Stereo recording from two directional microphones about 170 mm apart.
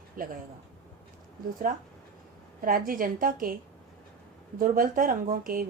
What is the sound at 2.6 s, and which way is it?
A woman's voice, 55° right (ahead or behind).